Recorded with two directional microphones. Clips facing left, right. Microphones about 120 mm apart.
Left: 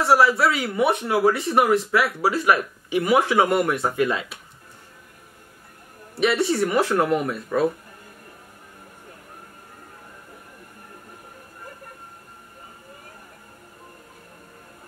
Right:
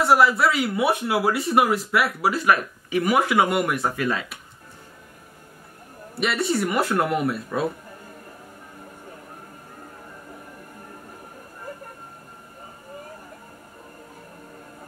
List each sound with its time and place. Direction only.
0.0 s speech: centre (ahead or behind)
2.5 s speech: 30° left (ahead or behind)
3.3 s speech: centre (ahead or behind)
6.1 s speech: centre (ahead or behind)